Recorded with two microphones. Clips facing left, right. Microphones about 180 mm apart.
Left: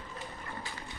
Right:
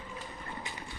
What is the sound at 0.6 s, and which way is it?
Boat, 20° right (ahead or behind).